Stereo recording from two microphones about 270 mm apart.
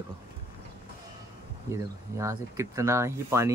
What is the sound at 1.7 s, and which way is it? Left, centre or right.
Speech, centre.